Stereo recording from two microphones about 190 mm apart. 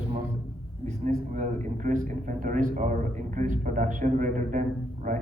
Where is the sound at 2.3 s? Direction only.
45° right (ahead or behind).